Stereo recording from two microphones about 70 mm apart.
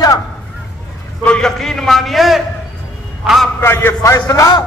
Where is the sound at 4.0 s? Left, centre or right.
Left.